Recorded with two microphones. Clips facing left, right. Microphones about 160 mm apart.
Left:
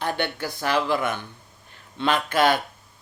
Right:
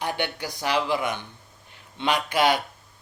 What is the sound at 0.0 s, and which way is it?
Speech, 15° right (ahead or behind).